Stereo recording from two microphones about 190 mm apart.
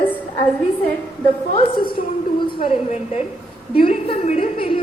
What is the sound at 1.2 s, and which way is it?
A woman's voice, 25° left (ahead or behind).